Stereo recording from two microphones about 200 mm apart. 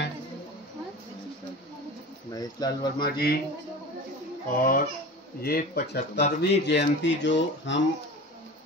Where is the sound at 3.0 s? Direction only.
50° left (ahead or behind).